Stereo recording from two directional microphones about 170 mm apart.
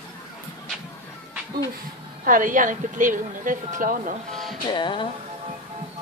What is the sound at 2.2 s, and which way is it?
A woman's voice, 50° right (ahead or behind).